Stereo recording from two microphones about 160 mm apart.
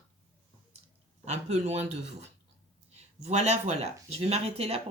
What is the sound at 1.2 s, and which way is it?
Speech, 45° right (ahead or behind).